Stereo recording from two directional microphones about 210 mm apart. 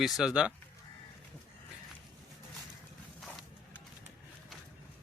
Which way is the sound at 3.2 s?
Centre (ahead or behind).